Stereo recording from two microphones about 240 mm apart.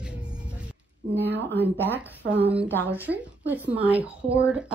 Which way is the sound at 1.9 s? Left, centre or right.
Centre.